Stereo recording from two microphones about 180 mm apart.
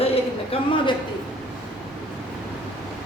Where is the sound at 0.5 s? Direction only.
30° left (ahead or behind).